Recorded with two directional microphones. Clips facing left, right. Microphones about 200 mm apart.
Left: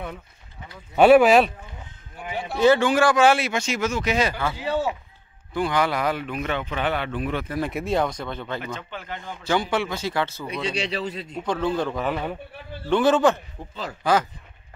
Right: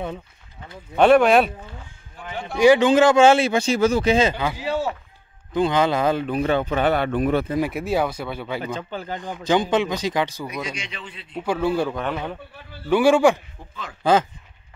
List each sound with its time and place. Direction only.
0.9 s a man's voice: 5° left (ahead or behind)
2.5 s speech: 15° right (ahead or behind); by 7.4 s 45° right (ahead or behind)
7.6 s speech: 5° right (ahead or behind)
8.6 s speech: 35° right (ahead or behind)
9.2 s speech: 15° right (ahead or behind)
10.5 s a man's voice: 30° left (ahead or behind)
11.3 s speech: 10° right (ahead or behind)
11.9 s speech: centre (ahead or behind)
12.9 s speech: 10° right (ahead or behind)